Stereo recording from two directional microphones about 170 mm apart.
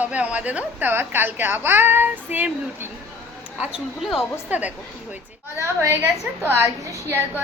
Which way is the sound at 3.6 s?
5° right (ahead or behind).